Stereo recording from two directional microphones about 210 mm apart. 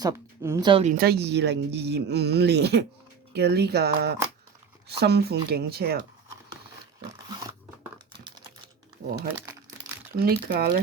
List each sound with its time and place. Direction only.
0.0 s speech: 15° right (ahead or behind)
0.7 s speech: 30° right (ahead or behind)
0.9 s speech: 50° right (ahead or behind)
10.2 s speech: 45° right (ahead or behind)